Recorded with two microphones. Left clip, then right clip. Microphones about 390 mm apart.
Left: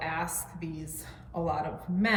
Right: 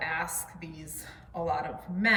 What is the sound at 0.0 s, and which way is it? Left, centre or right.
A woman's voice, centre.